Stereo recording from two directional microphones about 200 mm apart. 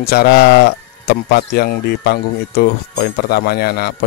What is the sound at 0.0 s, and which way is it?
Speech, 50° left (ahead or behind).